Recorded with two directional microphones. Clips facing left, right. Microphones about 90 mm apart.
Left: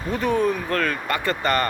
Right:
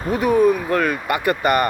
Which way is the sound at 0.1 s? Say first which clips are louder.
Right 6 dB; 10° right (ahead or behind).